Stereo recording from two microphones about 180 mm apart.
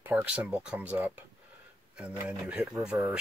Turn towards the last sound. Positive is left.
turn(degrees=-15)  # may be behind; listen again after turning